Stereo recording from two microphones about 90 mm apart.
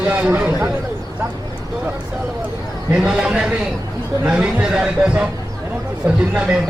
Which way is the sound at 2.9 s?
10° right (ahead or behind).